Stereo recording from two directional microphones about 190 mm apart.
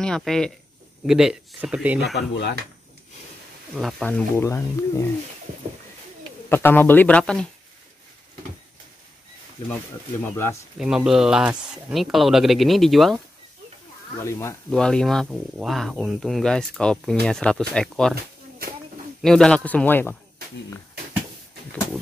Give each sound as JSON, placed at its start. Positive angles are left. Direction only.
{"t": 0.0, "sound": "speech", "side_deg": 5}
{"t": 2.1, "sound": "speech", "side_deg": 65}
{"t": 3.7, "sound": "speech", "side_deg": 5}
{"t": 6.5, "sound": "speech", "side_deg": 10}
{"t": 10.2, "sound": "speech", "side_deg": 15}
{"t": 10.8, "sound": "speech", "side_deg": -5}
{"t": 14.7, "sound": "speech", "side_deg": 5}
{"t": 19.2, "sound": "speech", "side_deg": 5}